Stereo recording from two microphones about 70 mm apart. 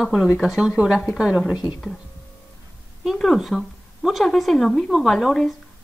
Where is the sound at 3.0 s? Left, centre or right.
Centre.